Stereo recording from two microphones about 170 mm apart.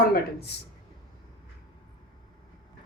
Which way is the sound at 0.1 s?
70° left (ahead or behind).